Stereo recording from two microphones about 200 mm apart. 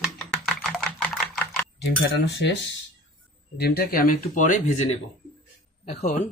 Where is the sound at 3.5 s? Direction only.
50° left (ahead or behind); by 5.0 s 35° left (ahead or behind).